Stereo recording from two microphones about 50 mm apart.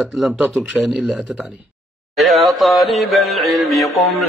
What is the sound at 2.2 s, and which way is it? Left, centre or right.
Music, centre.